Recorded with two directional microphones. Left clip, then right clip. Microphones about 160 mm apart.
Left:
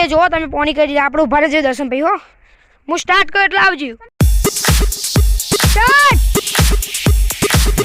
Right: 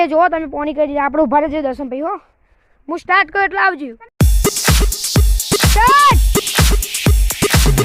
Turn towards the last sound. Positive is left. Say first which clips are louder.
# even
turn(degrees=0)  # may be behind; listen again after turning